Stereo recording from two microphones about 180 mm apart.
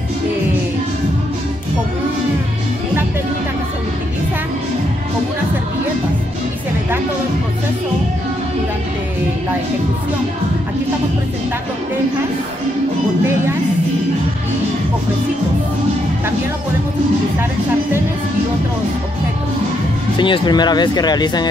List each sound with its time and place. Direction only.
20.2 s speech: 25° left (ahead or behind)